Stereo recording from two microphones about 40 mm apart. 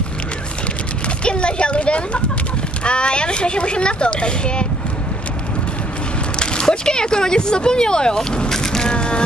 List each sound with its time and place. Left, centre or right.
1.0 s a sound: left
2.8 s speech: left
6.4 s speech: left
8.9 s music: left